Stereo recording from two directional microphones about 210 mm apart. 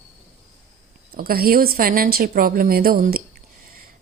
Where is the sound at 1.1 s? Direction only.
45° right (ahead or behind).